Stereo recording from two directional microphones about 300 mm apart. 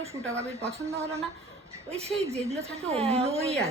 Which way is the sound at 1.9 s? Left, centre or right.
Right.